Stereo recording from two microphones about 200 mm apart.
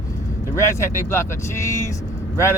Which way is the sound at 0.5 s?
15° left (ahead or behind).